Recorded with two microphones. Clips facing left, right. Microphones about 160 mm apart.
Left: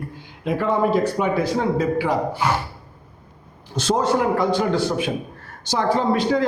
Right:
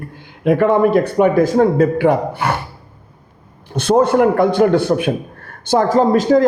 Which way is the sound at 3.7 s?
60° right (ahead or behind).